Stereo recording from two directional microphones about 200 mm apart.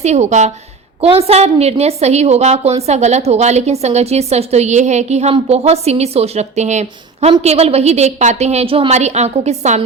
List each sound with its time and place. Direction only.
0.0 s a woman's voice: 35° right (ahead or behind)